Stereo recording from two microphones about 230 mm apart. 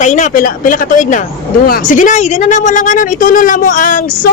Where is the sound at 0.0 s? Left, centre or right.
Left.